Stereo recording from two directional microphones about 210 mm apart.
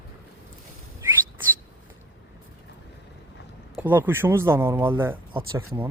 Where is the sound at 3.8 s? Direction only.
10° right (ahead or behind).